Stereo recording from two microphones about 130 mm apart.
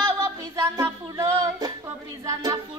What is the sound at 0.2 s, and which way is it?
Music, 30° right (ahead or behind).